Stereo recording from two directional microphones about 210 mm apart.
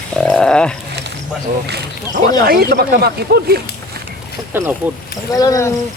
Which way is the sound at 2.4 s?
50° right (ahead or behind).